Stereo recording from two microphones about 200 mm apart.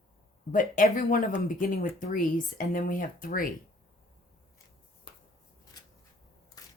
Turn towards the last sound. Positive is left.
turn(degrees=20)  # may be behind; listen again after turning